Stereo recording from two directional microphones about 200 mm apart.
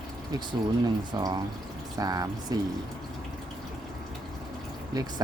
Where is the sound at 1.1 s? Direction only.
20° right (ahead or behind).